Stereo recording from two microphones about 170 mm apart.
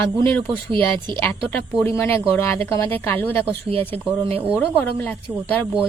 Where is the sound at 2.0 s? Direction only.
15° left (ahead or behind).